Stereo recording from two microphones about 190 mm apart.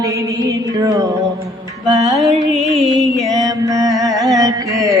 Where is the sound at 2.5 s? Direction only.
Centre (ahead or behind).